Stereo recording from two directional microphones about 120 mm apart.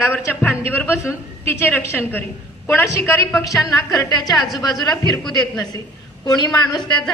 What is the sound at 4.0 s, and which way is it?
Speech, 35° left (ahead or behind).